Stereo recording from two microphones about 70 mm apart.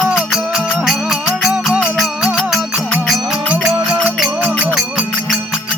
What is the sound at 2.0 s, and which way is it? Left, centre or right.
Music, centre.